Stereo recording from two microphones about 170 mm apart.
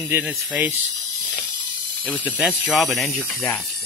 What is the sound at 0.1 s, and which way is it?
Speech, 5° right (ahead or behind).